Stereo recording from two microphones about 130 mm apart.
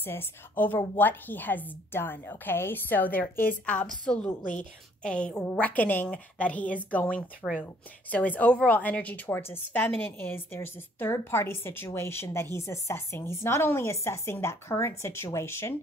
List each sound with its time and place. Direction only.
0.0 s a woman's voice: 15° left (ahead or behind)